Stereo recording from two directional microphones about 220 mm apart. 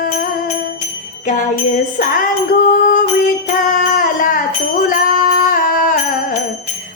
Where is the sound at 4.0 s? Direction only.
40° left (ahead or behind).